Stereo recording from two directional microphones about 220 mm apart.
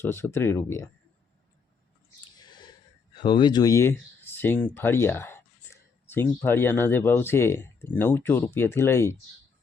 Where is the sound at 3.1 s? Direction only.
20° left (ahead or behind).